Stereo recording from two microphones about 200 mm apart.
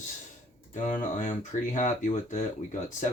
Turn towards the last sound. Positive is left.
turn(degrees=40)  # may be behind; listen again after turning